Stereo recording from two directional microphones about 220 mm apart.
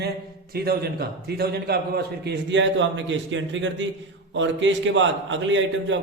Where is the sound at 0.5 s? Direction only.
45° right (ahead or behind).